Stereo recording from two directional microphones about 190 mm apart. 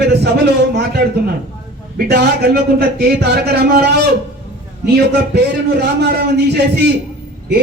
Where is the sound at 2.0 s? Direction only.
60° right (ahead or behind).